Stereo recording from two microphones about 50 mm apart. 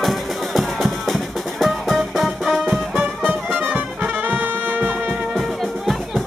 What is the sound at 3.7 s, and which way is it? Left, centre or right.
Brass instrument, right.